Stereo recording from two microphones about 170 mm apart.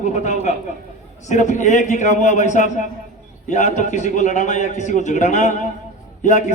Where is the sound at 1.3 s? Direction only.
45° left (ahead or behind).